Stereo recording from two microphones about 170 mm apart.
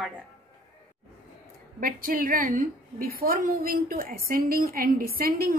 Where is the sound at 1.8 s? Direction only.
55° right (ahead or behind).